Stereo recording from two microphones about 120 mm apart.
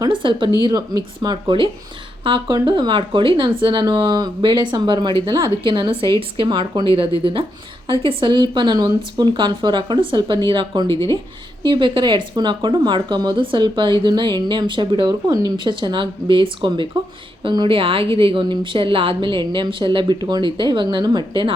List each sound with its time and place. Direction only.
0.1 s speech: 45° right (ahead or behind)
0.6 s speech: 30° right (ahead or behind)
15.3 s speech: 30° right (ahead or behind)